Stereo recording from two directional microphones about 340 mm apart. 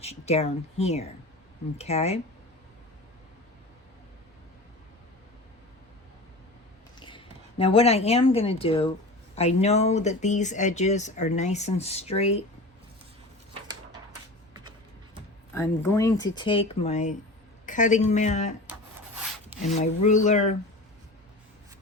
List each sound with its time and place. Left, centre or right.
0.0 s speech: centre
7.6 s speech: centre
15.5 s speech: centre
19.7 s speech: centre